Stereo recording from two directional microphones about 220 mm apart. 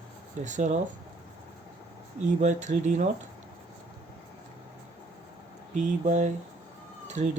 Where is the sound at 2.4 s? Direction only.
35° right (ahead or behind).